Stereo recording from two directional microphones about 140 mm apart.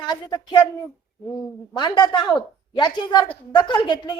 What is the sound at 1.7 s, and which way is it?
A woman's voice, 35° left (ahead or behind).